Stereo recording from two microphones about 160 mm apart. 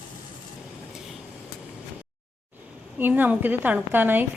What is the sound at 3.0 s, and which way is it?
A woman's voice, 10° right (ahead or behind).